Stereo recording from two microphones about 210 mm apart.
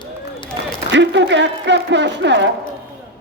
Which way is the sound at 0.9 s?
60° right (ahead or behind).